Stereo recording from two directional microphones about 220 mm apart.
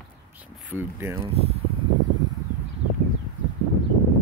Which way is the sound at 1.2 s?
30° right (ahead or behind).